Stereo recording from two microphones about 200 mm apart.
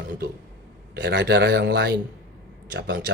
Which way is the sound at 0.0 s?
60° right (ahead or behind).